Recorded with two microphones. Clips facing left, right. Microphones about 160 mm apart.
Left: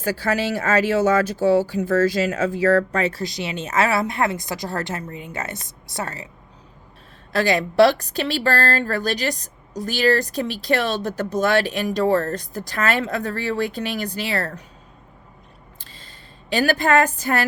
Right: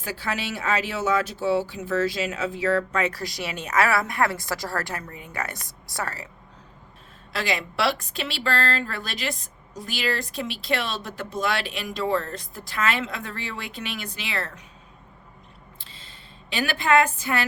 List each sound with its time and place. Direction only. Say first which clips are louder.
0.0 s speech: left 8 dB; 40° left (ahead or behind); by 6.2 s 20° left (ahead or behind)
7.3 s a woman's voice: left 10 dB; 40° left (ahead or behind)
15.8 s a sound: left 2 dB; 40° left (ahead or behind)